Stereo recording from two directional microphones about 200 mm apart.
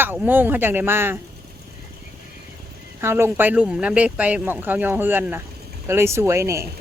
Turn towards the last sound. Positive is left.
turn(degrees=-15)  # may be behind; listen again after turning